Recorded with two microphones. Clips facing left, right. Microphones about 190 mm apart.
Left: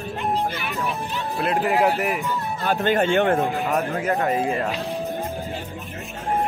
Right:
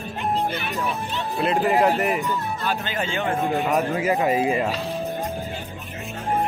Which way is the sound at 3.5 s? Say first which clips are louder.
Right 2 dB; centre (ahead or behind).